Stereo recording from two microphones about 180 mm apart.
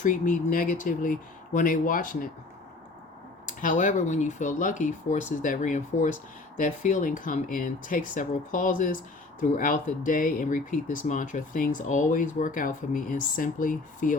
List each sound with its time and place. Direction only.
0.0 s speech: 45° left (ahead or behind)
3.4 s speech: 45° left (ahead or behind)